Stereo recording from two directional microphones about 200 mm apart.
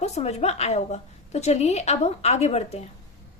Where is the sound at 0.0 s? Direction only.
35° left (ahead or behind).